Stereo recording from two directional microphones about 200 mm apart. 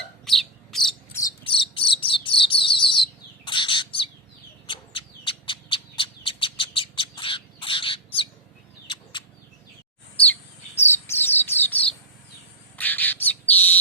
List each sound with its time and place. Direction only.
0.3 s bird: centre (ahead or behind)
1.5 s bird: 25° left (ahead or behind)
10.8 s bird: 10° left (ahead or behind)